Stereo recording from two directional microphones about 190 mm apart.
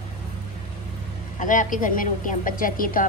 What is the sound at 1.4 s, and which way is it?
Speech, 40° left (ahead or behind).